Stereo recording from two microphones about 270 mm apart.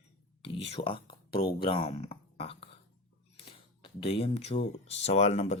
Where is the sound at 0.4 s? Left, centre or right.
Left.